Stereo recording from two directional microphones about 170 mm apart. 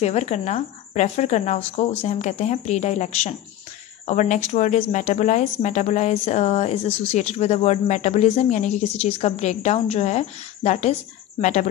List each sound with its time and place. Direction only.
0.0 s speech: 40° left (ahead or behind)